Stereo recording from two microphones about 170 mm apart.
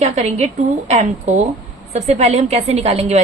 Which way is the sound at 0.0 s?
40° right (ahead or behind).